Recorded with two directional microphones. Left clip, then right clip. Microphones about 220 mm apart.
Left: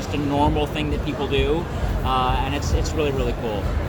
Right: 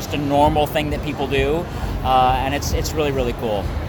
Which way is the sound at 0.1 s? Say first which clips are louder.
Right 5 dB; 55° right (ahead or behind).